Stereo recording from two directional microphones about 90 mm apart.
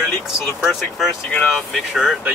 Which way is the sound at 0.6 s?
Centre (ahead or behind).